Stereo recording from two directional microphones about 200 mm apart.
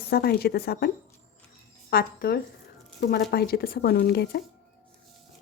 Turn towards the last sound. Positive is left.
turn(degrees=55)  # may be behind; listen again after turning